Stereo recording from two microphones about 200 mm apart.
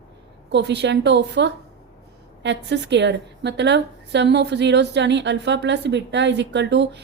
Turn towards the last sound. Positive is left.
turn(degrees=-60)  # may be behind; listen again after turning